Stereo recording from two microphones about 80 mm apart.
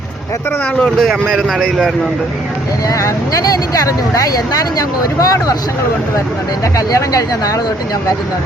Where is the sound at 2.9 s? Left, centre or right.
Left.